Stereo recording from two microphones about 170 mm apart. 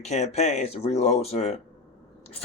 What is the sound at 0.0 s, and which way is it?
Speech, 40° left (ahead or behind).